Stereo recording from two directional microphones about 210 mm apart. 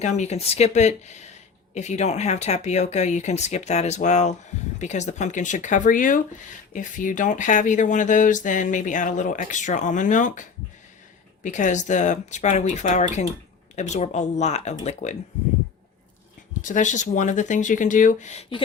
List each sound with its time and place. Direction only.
0.0 s speech: 35° left (ahead or behind)
11.4 s speech: 35° left (ahead or behind)
16.6 s speech: 35° left (ahead or behind)